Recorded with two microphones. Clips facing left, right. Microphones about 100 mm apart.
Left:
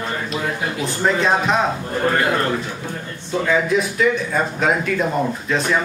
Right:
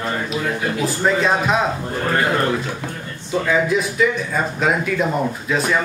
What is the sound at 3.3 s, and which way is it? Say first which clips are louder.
Speech: even; centre (ahead or behind).